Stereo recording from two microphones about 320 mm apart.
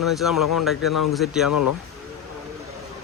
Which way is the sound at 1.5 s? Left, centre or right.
Left.